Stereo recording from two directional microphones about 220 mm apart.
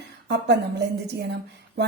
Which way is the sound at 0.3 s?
50° right (ahead or behind).